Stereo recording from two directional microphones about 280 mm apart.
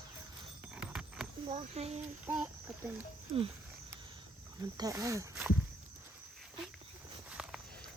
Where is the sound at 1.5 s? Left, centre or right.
Right.